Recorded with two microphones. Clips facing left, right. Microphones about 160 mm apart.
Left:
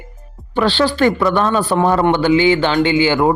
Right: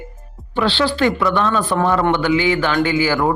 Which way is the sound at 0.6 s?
45° left (ahead or behind).